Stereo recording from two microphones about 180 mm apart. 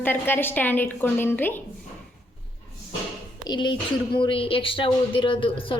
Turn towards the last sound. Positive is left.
turn(degrees=30)  # may be behind; listen again after turning